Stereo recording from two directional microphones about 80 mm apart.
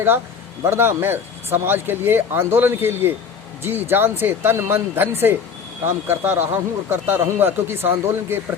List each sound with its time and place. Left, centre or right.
0.6 s speech: right